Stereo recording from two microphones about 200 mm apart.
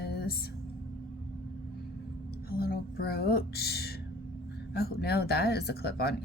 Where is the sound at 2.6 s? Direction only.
50° left (ahead or behind).